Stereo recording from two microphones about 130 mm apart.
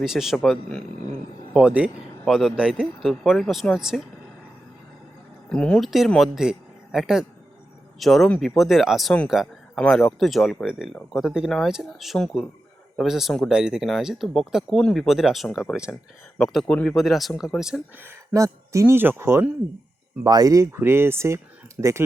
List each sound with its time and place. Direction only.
0.0 s speech: 5° right (ahead or behind)
5.5 s speech: 5° left (ahead or behind)
18.0 s speech: 20° right (ahead or behind)
20.2 s speech: 30° right (ahead or behind)